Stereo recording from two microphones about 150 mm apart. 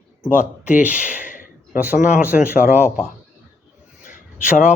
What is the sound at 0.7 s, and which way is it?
Speech, 10° right (ahead or behind).